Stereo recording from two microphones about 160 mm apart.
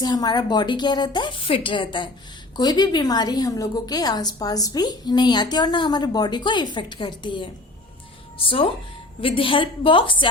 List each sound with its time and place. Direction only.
0.0 s a woman's voice: 25° left (ahead or behind)